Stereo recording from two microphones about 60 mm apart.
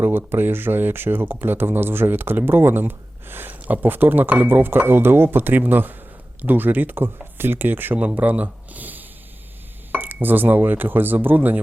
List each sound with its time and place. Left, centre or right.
0.0 s speech: right
7.9 s speech: right